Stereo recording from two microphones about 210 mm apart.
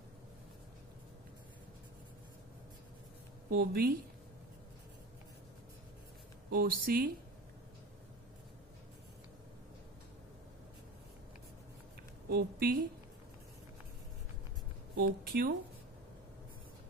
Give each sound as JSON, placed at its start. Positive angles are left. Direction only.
{"t": 3.4, "sound": "a woman's voice", "side_deg": -45}
{"t": 6.5, "sound": "speech", "side_deg": -45}
{"t": 12.3, "sound": "speech", "side_deg": -45}
{"t": 15.0, "sound": "speech", "side_deg": -45}